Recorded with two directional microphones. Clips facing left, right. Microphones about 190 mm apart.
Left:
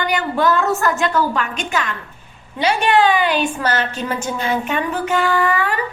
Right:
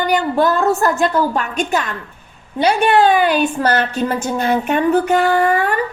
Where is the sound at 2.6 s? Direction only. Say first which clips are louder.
Right 3 dB; 50° right (ahead or behind).